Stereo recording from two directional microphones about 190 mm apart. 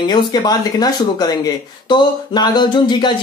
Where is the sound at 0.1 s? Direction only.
20° left (ahead or behind).